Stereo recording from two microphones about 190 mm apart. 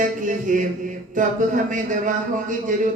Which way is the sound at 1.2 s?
45° right (ahead or behind).